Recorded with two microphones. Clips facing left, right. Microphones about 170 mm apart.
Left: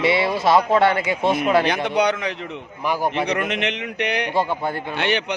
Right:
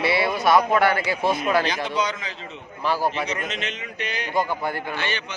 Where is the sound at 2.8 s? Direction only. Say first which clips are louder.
Left 2 dB; 15° left (ahead or behind).